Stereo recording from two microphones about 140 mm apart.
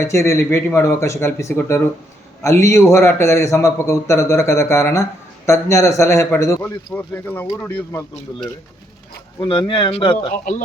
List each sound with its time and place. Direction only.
0.0 s a man's voice: 20° left (ahead or behind)
9.5 s speech: 35° left (ahead or behind)